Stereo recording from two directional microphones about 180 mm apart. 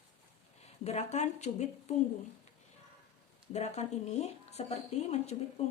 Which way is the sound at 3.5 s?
40° left (ahead or behind).